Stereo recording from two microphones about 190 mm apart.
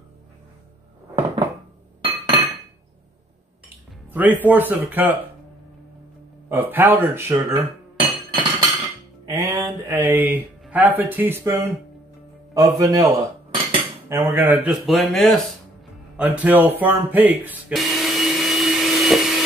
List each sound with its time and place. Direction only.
4.1 s speech: 10° right (ahead or behind)
6.5 s speech: 10° right (ahead or behind)
8.0 s chink: 25° right (ahead or behind)
9.3 s speech: 15° right (ahead or behind)
12.5 s cutlery: 15° right (ahead or behind)
14.0 s speech: 10° right (ahead or behind)
16.2 s music: 5° right (ahead or behind)